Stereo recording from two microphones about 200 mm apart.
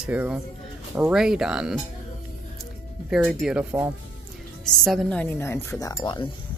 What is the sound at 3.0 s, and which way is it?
A woman's voice, centre (ahead or behind).